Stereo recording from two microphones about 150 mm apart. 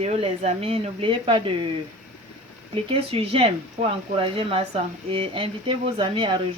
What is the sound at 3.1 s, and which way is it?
Speech, 40° right (ahead or behind).